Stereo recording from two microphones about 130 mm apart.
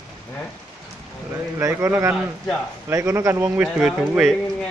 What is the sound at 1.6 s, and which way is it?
A man's voice, 15° right (ahead or behind).